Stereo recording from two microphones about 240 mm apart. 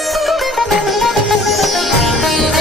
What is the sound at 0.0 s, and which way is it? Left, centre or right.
Sitar, centre.